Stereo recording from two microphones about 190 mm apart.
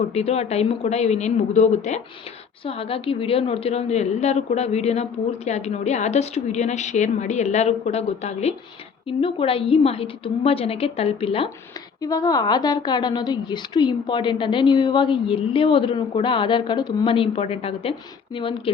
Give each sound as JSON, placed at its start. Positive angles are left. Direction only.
{"t": 0.1, "sound": "a woman's voice", "side_deg": 35}
{"t": 12.0, "sound": "a woman's voice", "side_deg": 20}